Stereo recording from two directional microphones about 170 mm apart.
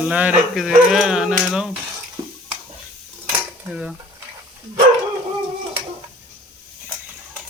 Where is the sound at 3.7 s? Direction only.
5° right (ahead or behind).